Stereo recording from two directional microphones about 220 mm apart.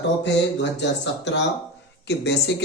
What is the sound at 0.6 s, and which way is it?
A man's voice, 55° left (ahead or behind).